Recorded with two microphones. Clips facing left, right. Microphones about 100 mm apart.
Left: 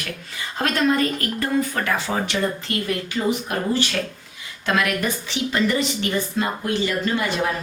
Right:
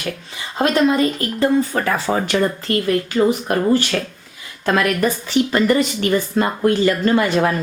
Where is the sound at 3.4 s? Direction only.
50° right (ahead or behind).